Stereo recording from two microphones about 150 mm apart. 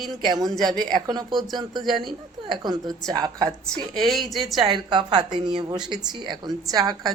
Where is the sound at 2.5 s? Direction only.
30° right (ahead or behind).